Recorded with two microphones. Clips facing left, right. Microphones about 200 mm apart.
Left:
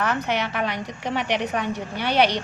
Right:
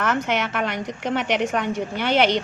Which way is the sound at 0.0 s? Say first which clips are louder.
Right 1 dB; 50° right (ahead or behind).